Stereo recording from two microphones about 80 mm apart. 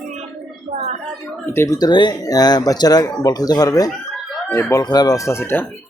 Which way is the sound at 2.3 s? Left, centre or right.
Left.